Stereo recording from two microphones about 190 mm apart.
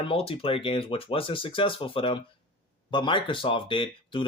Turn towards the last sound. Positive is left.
turn(degrees=25)  # may be behind; listen again after turning